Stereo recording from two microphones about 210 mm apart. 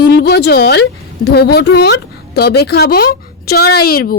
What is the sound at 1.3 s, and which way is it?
A woman's voice, 50° left (ahead or behind).